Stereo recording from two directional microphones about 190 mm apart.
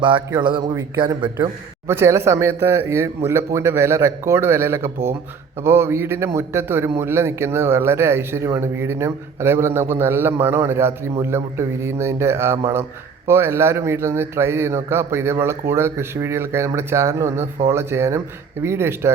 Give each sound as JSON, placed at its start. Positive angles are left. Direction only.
{"t": 0.3, "sound": "speech", "side_deg": -25}
{"t": 1.9, "sound": "a man's voice", "side_deg": -15}